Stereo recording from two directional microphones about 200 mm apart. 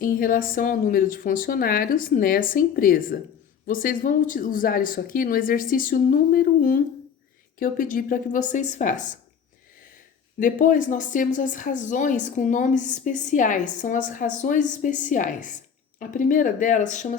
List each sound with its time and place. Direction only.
0.0 s a woman's voice: 45° left (ahead or behind)
10.4 s a woman's voice: 40° left (ahead or behind)